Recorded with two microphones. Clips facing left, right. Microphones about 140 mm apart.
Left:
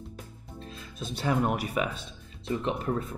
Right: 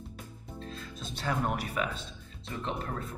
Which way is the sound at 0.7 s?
15° left (ahead or behind).